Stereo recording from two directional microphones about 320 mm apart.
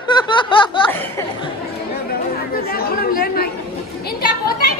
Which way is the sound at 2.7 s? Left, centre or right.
Left.